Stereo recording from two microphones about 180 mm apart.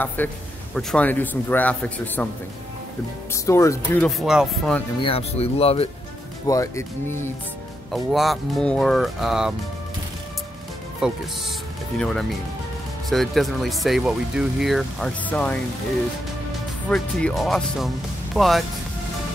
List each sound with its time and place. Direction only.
0.2 s a man's voice: 10° left (ahead or behind)
3.4 s a man's voice: 15° left (ahead or behind)
4.2 s speech: centre (ahead or behind)
5.0 s speech: 35° left (ahead or behind)
6.4 s a man's voice: 20° left (ahead or behind)
7.9 s speech: centre (ahead or behind)
11.0 s speech: 5° right (ahead or behind)
16.9 s speech: centre (ahead or behind)